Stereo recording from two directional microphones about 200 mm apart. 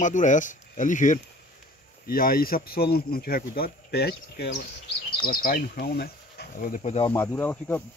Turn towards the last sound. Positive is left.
turn(degrees=10)  # may be behind; listen again after turning